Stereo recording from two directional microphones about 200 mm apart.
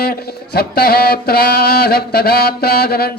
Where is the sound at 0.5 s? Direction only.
50° left (ahead or behind).